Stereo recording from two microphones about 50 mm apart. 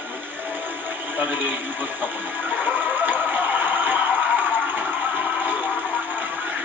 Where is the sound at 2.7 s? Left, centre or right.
Right.